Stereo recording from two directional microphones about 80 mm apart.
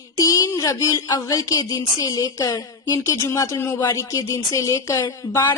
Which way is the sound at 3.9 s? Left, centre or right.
Left.